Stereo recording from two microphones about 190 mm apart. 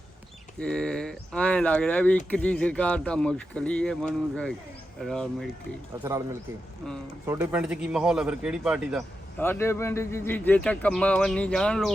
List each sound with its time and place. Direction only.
0.6 s speech: 5° left (ahead or behind)
6.0 s speech: 15° right (ahead or behind)
7.3 s speech: 10° right (ahead or behind)
9.4 s speech: 10° left (ahead or behind)